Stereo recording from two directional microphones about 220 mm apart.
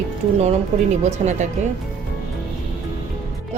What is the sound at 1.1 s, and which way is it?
Speech, 30° right (ahead or behind).